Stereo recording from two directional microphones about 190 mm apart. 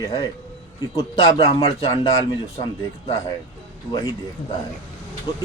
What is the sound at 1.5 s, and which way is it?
Speech, 25° left (ahead or behind).